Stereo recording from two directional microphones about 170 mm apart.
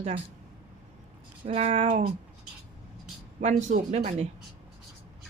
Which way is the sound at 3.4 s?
45° right (ahead or behind).